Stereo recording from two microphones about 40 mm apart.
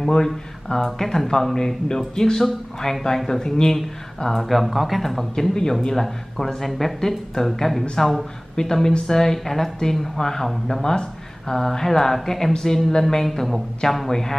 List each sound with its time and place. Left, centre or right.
0.9 s speech: centre
4.3 s speech: centre